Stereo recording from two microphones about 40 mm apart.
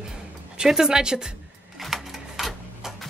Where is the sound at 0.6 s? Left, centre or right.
Centre.